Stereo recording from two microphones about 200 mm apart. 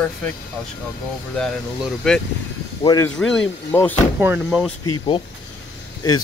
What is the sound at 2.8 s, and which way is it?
Speech, 20° left (ahead or behind).